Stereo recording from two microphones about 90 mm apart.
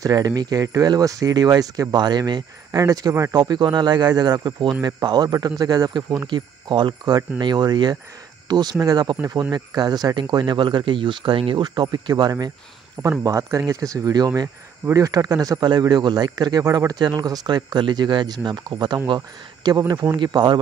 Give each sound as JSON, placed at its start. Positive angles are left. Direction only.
{"t": 0.0, "sound": "speech", "side_deg": -45}
{"t": 2.8, "sound": "speech", "side_deg": -40}
{"t": 3.3, "sound": "speech", "side_deg": -50}
{"t": 11.6, "sound": "speech", "side_deg": -50}
{"t": 13.2, "sound": "speech", "side_deg": -35}